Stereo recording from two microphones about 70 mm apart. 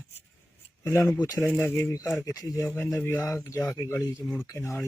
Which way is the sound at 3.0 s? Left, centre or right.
Left.